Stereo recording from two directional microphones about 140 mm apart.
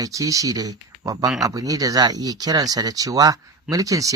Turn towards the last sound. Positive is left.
turn(degrees=-25)  # may be behind; listen again after turning